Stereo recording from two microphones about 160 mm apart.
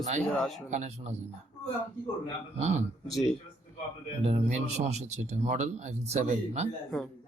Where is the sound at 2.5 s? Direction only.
45° right (ahead or behind).